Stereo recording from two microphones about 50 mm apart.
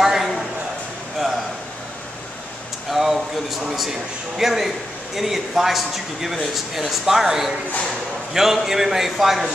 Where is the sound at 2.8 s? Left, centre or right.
Centre.